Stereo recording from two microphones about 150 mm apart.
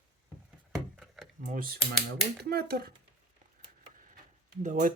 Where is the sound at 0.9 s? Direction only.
Centre (ahead or behind).